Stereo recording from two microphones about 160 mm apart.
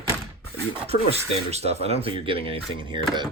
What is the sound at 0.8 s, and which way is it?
Speech, 40° right (ahead or behind).